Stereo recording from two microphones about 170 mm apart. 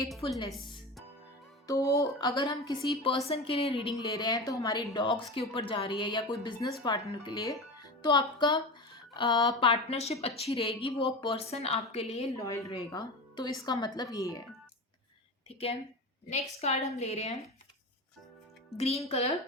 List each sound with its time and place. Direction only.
0.4 s music: centre (ahead or behind)
1.6 s speech: 20° left (ahead or behind); by 11.8 s 35° left (ahead or behind)
12.4 s speech: 20° left (ahead or behind)
15.4 s speech: 35° left (ahead or behind)
18.8 s speech: 35° left (ahead or behind)